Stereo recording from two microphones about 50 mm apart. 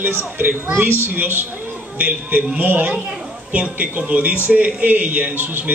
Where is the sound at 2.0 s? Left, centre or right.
Right.